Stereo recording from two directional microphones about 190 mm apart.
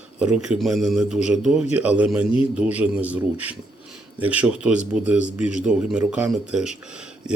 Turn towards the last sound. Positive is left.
turn(degrees=-5)  # may be behind; listen again after turning